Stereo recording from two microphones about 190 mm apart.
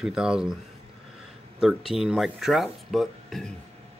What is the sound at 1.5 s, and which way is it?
Speech, centre (ahead or behind).